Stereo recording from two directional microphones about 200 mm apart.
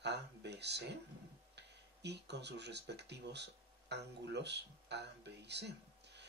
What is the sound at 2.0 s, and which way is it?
Speech, 60° right (ahead or behind).